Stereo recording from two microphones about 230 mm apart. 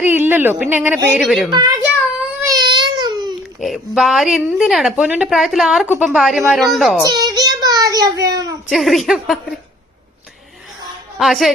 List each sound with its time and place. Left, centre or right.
0.0 s a woman's voice: centre
1.5 s a woman's voice: centre
2.4 s a sound: centre
3.4 s speech: centre
7.1 s child singing: centre
8.7 s speech: centre
11.2 s speech: centre